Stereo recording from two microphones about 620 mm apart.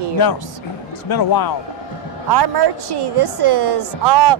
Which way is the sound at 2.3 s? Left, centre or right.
Right.